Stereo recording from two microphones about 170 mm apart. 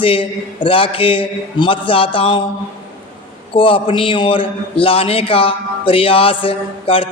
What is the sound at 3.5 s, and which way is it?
A man's voice, 30° left (ahead or behind).